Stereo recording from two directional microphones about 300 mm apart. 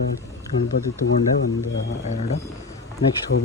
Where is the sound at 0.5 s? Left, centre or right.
Left.